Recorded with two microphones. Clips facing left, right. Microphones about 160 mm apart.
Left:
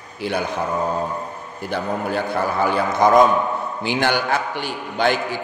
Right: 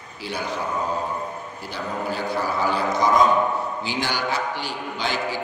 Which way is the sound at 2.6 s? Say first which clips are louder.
Left 4 dB; 55° left (ahead or behind).